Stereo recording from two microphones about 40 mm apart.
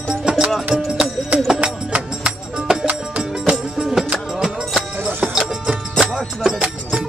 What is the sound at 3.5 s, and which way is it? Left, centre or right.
Music, centre.